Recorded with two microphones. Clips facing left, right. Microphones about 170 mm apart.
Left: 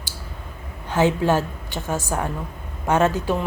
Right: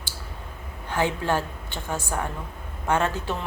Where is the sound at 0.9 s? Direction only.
15° left (ahead or behind).